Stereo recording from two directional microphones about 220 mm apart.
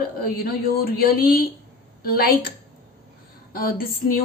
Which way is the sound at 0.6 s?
45° left (ahead or behind).